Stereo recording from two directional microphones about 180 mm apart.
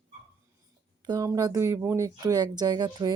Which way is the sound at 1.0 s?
20° right (ahead or behind).